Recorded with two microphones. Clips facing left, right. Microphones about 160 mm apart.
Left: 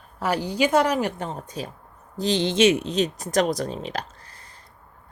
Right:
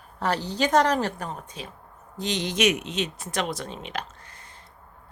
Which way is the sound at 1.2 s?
30° left (ahead or behind).